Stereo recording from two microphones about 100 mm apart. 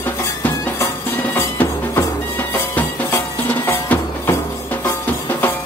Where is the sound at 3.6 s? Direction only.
20° left (ahead or behind).